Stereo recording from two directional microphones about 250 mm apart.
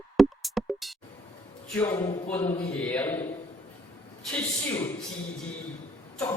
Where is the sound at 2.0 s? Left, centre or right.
Centre.